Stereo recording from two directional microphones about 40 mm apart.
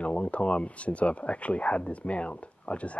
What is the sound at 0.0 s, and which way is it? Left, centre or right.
Speech, left.